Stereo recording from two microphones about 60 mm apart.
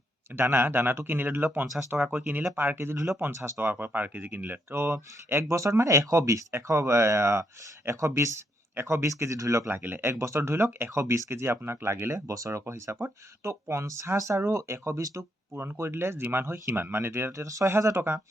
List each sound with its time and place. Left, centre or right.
0.3 s speech: right
3.6 s speech: right
4.7 s speech: right
5.5 s speech: right
9.6 s speech: right
10.9 s speech: right
17.4 s speech: right
17.8 s speech: right